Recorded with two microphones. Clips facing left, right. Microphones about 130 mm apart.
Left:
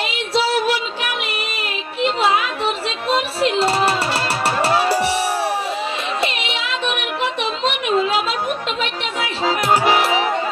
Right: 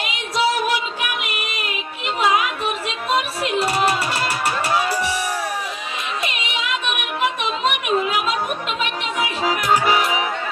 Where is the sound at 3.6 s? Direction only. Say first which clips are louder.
Left 2 dB; 30° left (ahead or behind).